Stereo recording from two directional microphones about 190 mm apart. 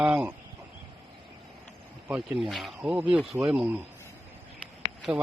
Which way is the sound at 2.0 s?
5° right (ahead or behind).